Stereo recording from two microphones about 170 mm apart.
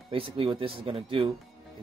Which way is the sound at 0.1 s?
35° right (ahead or behind).